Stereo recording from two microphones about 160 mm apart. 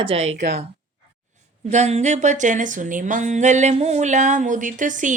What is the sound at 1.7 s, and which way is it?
Speech, 45° right (ahead or behind).